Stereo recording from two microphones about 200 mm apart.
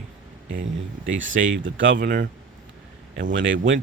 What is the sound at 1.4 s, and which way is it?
Speech, 70° right (ahead or behind).